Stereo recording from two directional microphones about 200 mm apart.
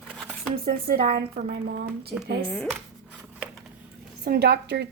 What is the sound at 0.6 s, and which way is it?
A woman's voice, 50° right (ahead or behind).